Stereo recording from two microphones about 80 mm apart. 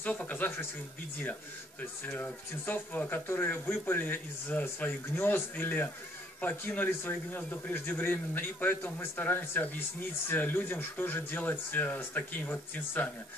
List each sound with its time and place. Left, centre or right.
0.0 s a man's voice: centre
1.8 s a man's voice: left